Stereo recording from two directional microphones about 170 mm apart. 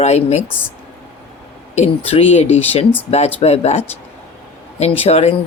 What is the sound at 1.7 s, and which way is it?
Speech, 40° left (ahead or behind).